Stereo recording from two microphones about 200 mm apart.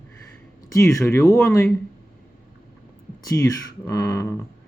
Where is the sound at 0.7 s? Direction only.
15° left (ahead or behind).